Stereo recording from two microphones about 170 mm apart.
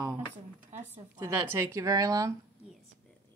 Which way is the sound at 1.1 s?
15° right (ahead or behind).